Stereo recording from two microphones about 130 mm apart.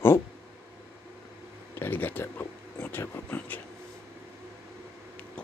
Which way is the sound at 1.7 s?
15° left (ahead or behind).